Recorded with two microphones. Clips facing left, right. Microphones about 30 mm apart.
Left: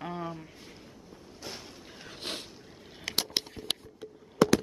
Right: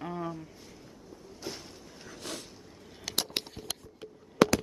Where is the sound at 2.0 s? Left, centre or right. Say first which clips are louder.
Left 2 dB; left.